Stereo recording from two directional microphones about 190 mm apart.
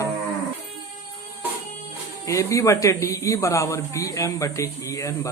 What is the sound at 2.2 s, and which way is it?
Speech, 15° left (ahead or behind).